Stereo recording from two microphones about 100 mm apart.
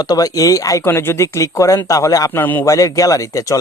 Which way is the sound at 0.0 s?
40° left (ahead or behind).